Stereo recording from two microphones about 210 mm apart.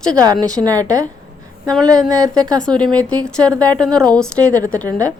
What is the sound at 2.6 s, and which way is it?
Speech, 5° left (ahead or behind).